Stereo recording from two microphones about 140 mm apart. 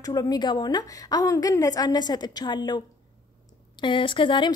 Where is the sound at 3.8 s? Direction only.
35° left (ahead or behind).